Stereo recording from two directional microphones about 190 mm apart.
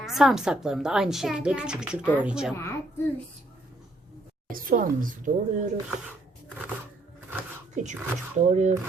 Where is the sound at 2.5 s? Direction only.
15° left (ahead or behind).